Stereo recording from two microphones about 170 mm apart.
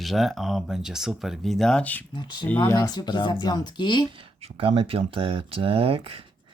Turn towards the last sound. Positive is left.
turn(degrees=-35)  # may be behind; listen again after turning